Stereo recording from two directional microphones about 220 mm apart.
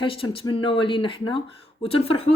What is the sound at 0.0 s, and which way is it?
Speech, 25° left (ahead or behind).